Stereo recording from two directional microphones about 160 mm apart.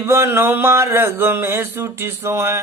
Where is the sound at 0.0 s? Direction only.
15° right (ahead or behind).